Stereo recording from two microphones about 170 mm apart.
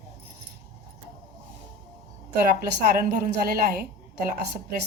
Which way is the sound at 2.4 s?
60° right (ahead or behind).